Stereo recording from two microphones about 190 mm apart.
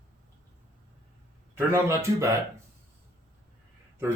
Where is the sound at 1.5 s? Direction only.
15° right (ahead or behind).